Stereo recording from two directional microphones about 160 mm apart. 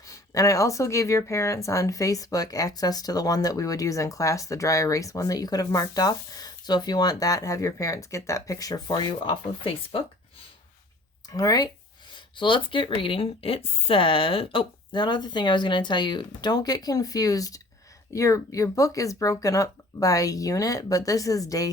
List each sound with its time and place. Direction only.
0.0 s speech: 20° left (ahead or behind)
11.3 s speech: 20° left (ahead or behind)